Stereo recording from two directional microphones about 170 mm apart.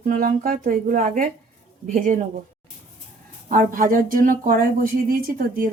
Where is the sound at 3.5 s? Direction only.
55° right (ahead or behind).